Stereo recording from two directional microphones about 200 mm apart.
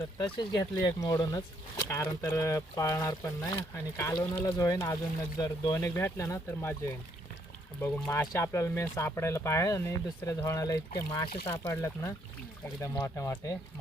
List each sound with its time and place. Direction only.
0.2 s speech: 20° left (ahead or behind)
7.8 s speech: 10° left (ahead or behind)